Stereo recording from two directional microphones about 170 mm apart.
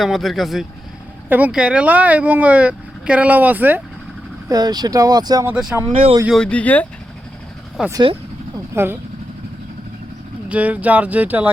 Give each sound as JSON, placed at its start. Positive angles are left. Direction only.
{"t": 0.0, "sound": "speech", "side_deg": 0}
{"t": 4.4, "sound": "speech", "side_deg": -25}
{"t": 5.5, "sound": "speech", "side_deg": -5}
{"t": 7.8, "sound": "speech", "side_deg": -5}
{"t": 8.7, "sound": "speech", "side_deg": -15}
{"t": 10.5, "sound": "speech", "side_deg": -10}